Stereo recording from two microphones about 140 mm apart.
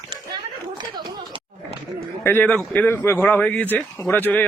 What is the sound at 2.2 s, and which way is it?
A man's voice, 15° left (ahead or behind).